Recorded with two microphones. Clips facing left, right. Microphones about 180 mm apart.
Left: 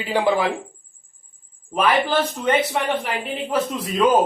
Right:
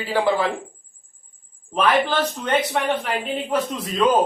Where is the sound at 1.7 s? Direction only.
10° left (ahead or behind).